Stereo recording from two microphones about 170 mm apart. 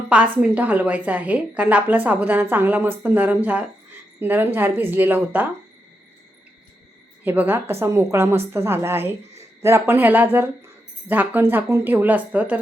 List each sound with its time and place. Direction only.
0.1 s a woman's voice: 10° right (ahead or behind)
7.3 s a woman's voice: 10° right (ahead or behind)